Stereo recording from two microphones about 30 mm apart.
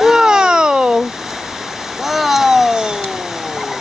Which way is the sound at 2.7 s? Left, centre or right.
Right.